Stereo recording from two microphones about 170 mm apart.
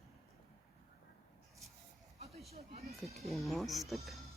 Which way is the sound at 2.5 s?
40° right (ahead or behind).